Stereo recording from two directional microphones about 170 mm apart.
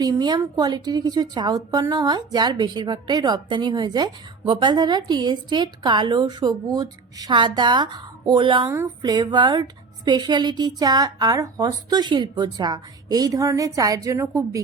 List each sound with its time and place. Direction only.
0.0 s a woman's voice: 25° right (ahead or behind)